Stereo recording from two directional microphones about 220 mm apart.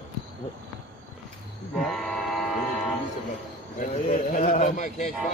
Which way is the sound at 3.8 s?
30° left (ahead or behind).